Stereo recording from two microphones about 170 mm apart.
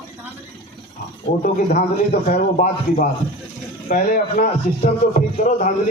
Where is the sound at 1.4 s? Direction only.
55° left (ahead or behind).